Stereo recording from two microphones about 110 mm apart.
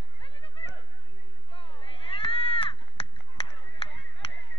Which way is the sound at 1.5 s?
55° left (ahead or behind).